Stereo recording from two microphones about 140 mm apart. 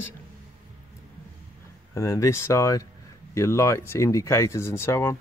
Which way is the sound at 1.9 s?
20° left (ahead or behind).